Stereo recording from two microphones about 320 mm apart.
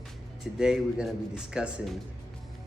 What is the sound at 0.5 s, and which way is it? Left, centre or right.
Speech, centre.